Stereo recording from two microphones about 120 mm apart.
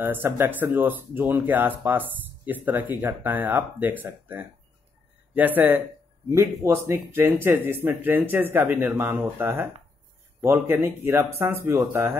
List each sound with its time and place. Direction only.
0.0 s speech: 15° right (ahead or behind)